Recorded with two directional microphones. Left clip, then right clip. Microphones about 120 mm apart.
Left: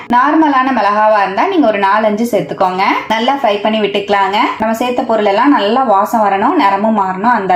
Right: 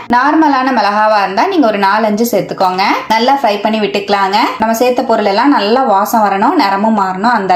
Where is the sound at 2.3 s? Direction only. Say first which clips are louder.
Right 1 dB; 20° right (ahead or behind).